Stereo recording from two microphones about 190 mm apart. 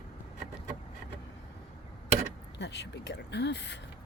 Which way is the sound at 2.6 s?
65° left (ahead or behind).